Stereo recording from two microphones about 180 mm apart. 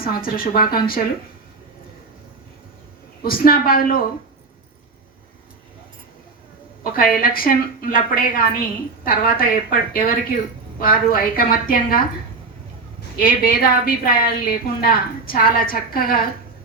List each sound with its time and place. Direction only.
0.0 s a woman's voice: 55° left (ahead or behind)
3.2 s a woman's voice: 55° left (ahead or behind)
6.8 s a woman's voice: 55° left (ahead or behind)
13.1 s a woman's voice: 55° left (ahead or behind)